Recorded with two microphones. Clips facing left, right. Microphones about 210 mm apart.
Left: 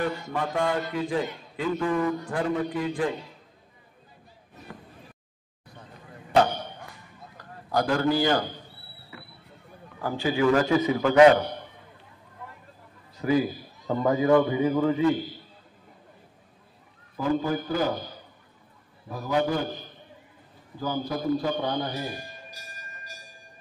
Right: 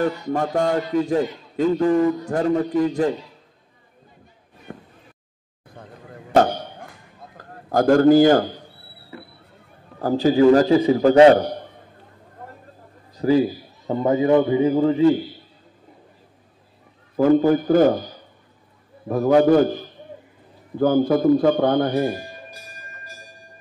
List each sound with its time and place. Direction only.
0.0 s a man's voice: 45° right (ahead or behind)
1.7 s a man's voice: 35° right (ahead or behind)
4.7 s a sound: 30° right (ahead or behind)
5.7 s arrow: 50° right (ahead or behind)
9.9 s a man's voice: 40° right (ahead or behind)
13.1 s a man's voice: 35° right (ahead or behind)
17.2 s a man's voice: 50° right (ahead or behind)
19.0 s speech: 55° right (ahead or behind)
20.7 s speech: 55° right (ahead or behind)